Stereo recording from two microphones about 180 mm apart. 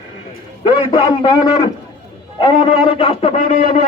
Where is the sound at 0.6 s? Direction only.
30° left (ahead or behind).